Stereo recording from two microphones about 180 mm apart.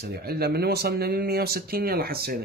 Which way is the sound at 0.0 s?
60° right (ahead or behind).